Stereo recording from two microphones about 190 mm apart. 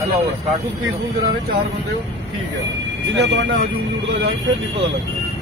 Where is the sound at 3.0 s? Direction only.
70° right (ahead or behind).